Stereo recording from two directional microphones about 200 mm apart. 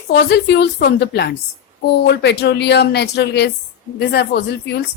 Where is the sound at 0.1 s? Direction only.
55° left (ahead or behind).